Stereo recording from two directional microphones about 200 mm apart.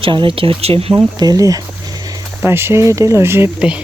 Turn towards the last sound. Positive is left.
turn(degrees=-5)  # may be behind; listen again after turning